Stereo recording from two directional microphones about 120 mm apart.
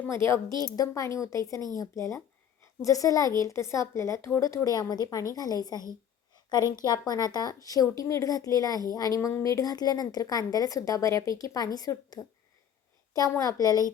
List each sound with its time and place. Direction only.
0.0 s speech: 20° left (ahead or behind)
6.3 s a sound: 30° left (ahead or behind)
7.1 s speech: 35° left (ahead or behind)